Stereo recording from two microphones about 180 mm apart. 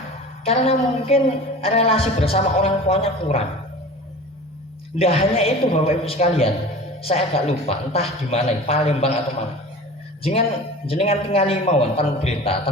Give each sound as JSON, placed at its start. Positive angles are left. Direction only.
{"t": 0.4, "sound": "a man's voice", "side_deg": 35}
{"t": 4.9, "sound": "a man's voice", "side_deg": 35}
{"t": 10.8, "sound": "a man's voice", "side_deg": 35}